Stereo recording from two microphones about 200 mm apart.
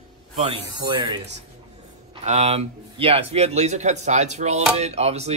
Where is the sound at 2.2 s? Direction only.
30° right (ahead or behind).